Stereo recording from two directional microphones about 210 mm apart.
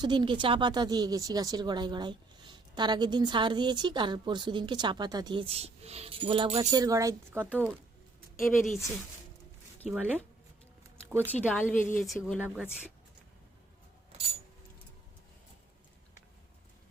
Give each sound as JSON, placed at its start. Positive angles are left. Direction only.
{"t": 0.0, "sound": "speech", "side_deg": -20}
{"t": 7.5, "sound": "a woman's voice", "side_deg": 5}
{"t": 9.9, "sound": "a woman's voice", "side_deg": -10}